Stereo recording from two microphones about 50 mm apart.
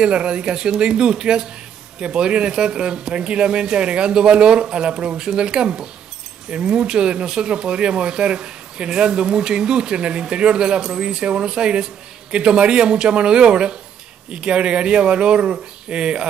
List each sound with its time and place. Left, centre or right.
0.0 s speech: centre